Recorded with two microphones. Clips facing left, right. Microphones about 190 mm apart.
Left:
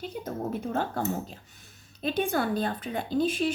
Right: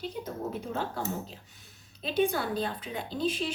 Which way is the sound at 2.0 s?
50° left (ahead or behind).